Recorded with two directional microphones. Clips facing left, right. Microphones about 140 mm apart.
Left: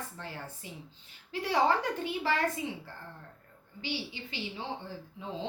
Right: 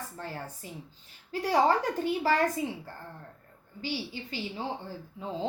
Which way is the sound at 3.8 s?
40° right (ahead or behind).